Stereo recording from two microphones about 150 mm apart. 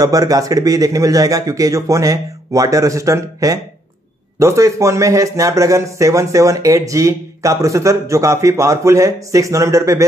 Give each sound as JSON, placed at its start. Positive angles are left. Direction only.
{"t": 0.0, "sound": "speech", "side_deg": -25}